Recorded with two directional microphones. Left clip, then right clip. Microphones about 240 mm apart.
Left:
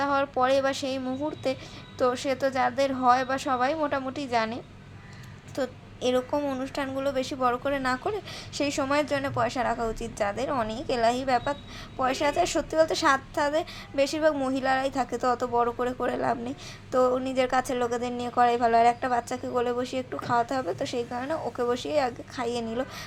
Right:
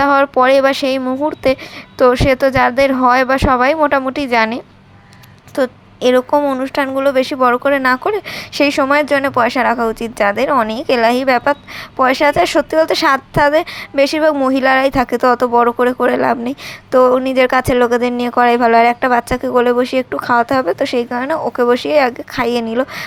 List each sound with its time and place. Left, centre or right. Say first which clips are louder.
0.0 s a woman's voice: right 14 dB; right